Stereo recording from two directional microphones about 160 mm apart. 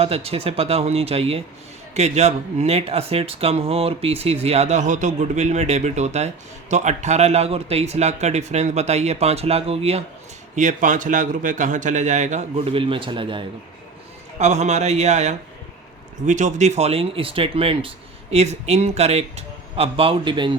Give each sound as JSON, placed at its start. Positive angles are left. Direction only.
{"t": 0.0, "sound": "speech", "side_deg": -40}
{"t": 10.5, "sound": "speech", "side_deg": -50}
{"t": 14.3, "sound": "speech", "side_deg": -45}